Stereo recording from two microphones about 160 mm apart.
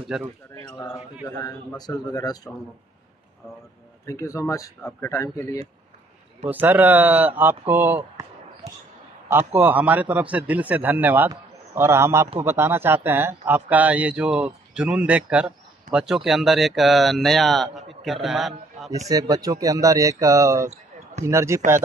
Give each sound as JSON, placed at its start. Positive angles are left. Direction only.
{"t": 0.0, "sound": "a man's voice", "side_deg": -5}
{"t": 1.8, "sound": "speech", "side_deg": 25}
{"t": 4.0, "sound": "speech", "side_deg": 20}
{"t": 6.5, "sound": "a man's voice", "side_deg": -10}
{"t": 9.3, "sound": "a man's voice", "side_deg": -10}
{"t": 19.0, "sound": "a man's voice", "side_deg": -20}